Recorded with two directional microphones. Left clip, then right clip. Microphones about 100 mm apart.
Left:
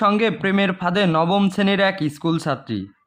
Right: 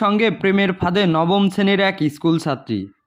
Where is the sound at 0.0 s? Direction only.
20° right (ahead or behind).